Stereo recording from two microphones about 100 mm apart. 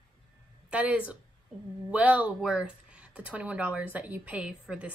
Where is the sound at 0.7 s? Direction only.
15° right (ahead or behind).